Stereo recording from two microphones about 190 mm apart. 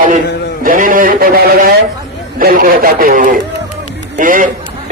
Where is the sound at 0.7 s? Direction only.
45° right (ahead or behind).